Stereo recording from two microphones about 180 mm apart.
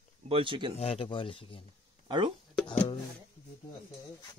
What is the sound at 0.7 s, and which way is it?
Speech, 35° left (ahead or behind).